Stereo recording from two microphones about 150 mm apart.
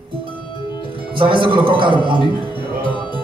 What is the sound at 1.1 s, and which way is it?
A man's voice, 35° right (ahead or behind).